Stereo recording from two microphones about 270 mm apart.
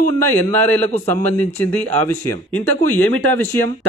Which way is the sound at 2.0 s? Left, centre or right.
Centre.